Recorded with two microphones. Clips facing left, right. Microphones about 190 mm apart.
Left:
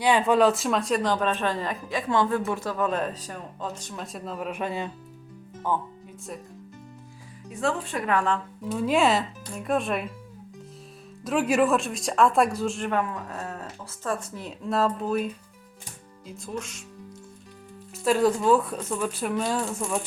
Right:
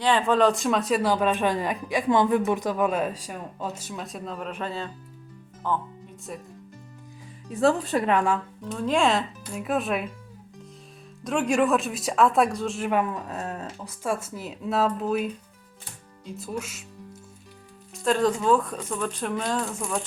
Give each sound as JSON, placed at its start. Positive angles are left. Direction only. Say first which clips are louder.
{"t": 0.0, "sound": "speech", "louder": "left 1 dB", "side_deg": 10}
{"t": 7.6, "sound": "speech", "louder": "right 6 dB", "side_deg": -35}
{"t": 8.0, "sound": "speech", "louder": "right 1 dB", "side_deg": -20}
{"t": 8.6, "sound": "speech", "louder": "left 1 dB", "side_deg": 5}
{"t": 11.2, "sound": "speech", "louder": "left 1 dB", "side_deg": 5}
{"t": 12.9, "sound": "speech", "louder": "right 2 dB", "side_deg": -15}
{"t": 17.9, "sound": "speech", "louder": "left 1 dB", "side_deg": 5}